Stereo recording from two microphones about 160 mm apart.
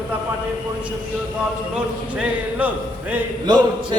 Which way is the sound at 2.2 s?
10° right (ahead or behind).